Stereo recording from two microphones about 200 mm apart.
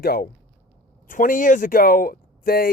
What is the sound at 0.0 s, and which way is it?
Speech, 50° left (ahead or behind).